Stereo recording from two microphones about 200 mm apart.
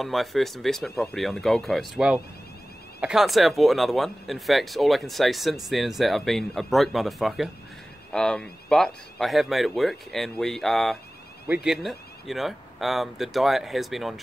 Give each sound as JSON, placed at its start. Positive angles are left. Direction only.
{"t": 0.0, "sound": "speech", "side_deg": 0}